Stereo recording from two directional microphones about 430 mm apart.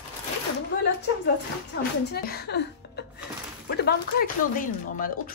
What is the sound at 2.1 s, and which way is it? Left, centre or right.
A woman's voice, left.